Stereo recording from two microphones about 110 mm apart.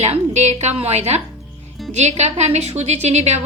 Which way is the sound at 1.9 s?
90° right.